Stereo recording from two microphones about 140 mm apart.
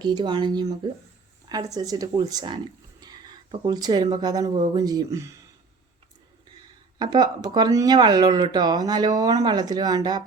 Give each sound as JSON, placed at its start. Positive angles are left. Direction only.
{"t": 0.0, "sound": "speech", "side_deg": -35}
{"t": 7.0, "sound": "speech", "side_deg": -30}